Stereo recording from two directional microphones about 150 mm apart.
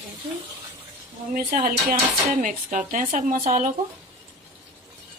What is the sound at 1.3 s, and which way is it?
Speech, 75° right (ahead or behind).